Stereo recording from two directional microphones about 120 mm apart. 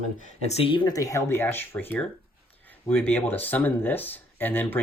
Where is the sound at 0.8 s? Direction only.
30° left (ahead or behind).